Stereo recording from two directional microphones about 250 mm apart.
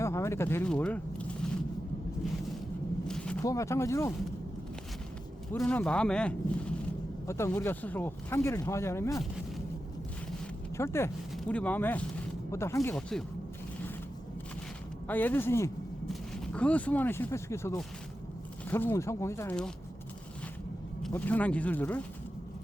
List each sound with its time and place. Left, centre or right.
0.0 s a sound: centre
3.1 s speech: centre
5.5 s speech: centre
10.8 s speech: centre
15.0 s speech: centre
21.0 s speech: centre